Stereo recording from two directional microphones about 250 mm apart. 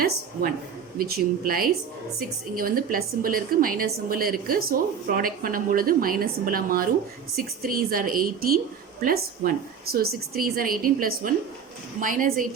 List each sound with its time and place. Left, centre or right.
0.9 s a woman's voice: right